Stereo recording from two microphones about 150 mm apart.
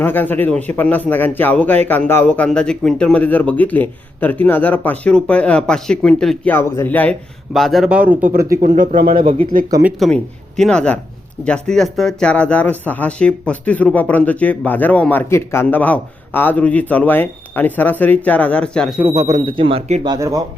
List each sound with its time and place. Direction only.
0.0 s a man's voice: 15° left (ahead or behind)
7.5 s speech: centre (ahead or behind)
8.2 s speech: 80° right; by 9.3 s 65° right (ahead or behind)
10.0 s a man's voice: centre (ahead or behind)
18.9 s speech: 15° right (ahead or behind)
19.5 s speech: 35° right (ahead or behind)
20.1 s speech: 20° right (ahead or behind)